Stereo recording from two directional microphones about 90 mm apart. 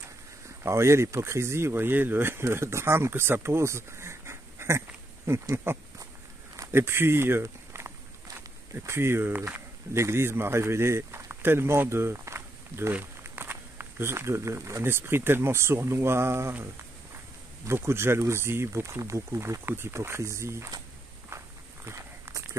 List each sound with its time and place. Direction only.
0.7 s speech: 30° right (ahead or behind)
17.6 s speech: 30° right (ahead or behind)
21.8 s walk: 35° right (ahead or behind)